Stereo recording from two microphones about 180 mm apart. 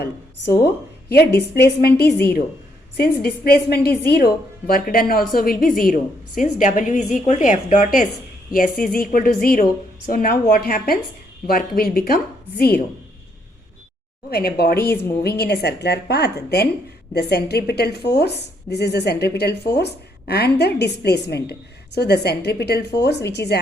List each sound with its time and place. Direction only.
1.1 s a woman's voice: 65° left (ahead or behind)
14.3 s a woman's voice: 60° left (ahead or behind)